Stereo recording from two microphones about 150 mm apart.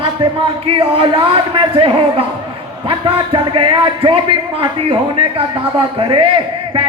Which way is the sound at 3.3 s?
35° right (ahead or behind).